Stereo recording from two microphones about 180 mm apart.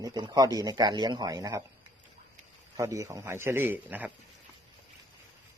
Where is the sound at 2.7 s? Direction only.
20° right (ahead or behind).